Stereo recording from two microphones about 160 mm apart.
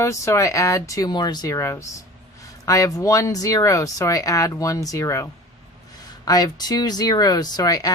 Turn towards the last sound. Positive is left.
turn(degrees=25)  # may be behind; listen again after turning